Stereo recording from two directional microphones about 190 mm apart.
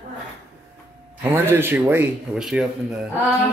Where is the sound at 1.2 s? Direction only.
10° right (ahead or behind).